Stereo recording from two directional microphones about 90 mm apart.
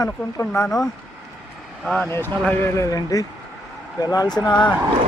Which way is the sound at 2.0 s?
30° left (ahead or behind).